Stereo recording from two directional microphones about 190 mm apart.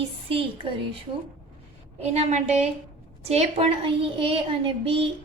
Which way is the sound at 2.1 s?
40° right (ahead or behind).